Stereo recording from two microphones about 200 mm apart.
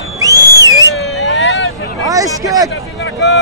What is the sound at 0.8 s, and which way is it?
Vehicle, 60° left (ahead or behind).